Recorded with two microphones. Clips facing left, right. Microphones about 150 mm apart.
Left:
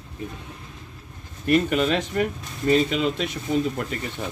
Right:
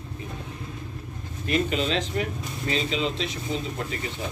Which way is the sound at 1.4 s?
55° left (ahead or behind).